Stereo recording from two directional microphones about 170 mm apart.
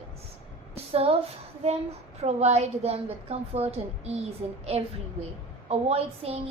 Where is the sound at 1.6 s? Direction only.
35° right (ahead or behind).